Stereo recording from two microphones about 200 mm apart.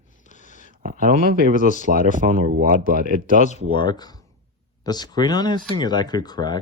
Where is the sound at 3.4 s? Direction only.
35° left (ahead or behind).